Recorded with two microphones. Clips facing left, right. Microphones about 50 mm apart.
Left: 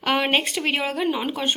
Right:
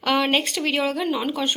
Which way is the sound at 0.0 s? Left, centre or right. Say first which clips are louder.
Right 1 dB; centre.